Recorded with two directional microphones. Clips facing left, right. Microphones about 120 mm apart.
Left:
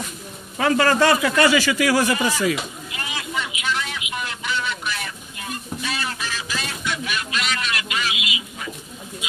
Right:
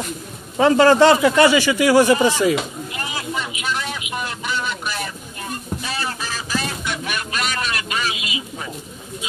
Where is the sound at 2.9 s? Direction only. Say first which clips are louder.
Right 3 dB; 35° right (ahead or behind).